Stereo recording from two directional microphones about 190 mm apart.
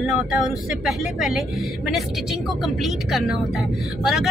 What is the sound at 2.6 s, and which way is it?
Speech, centre (ahead or behind).